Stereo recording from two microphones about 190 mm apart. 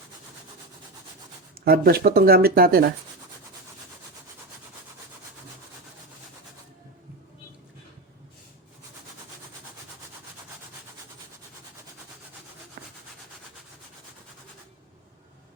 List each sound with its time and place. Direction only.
1.6 s speech: 55° right (ahead or behind)
12.8 s rub: 45° right (ahead or behind)